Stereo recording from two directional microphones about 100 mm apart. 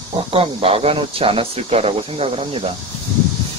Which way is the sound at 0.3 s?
70° right (ahead or behind).